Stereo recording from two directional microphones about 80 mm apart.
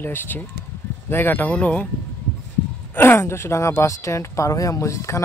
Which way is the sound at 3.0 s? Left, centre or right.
Left.